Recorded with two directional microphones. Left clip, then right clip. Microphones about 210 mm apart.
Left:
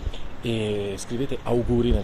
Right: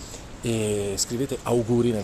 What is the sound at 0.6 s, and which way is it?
Speech, 5° right (ahead or behind).